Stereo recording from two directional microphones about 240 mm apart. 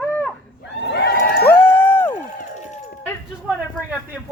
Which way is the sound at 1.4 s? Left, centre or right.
Centre.